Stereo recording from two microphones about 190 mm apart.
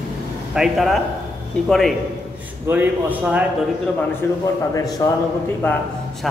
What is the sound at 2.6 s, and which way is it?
Speech, 10° right (ahead or behind).